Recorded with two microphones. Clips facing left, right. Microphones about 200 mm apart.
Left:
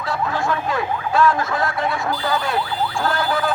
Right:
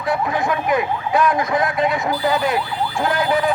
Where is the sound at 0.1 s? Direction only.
20° right (ahead or behind).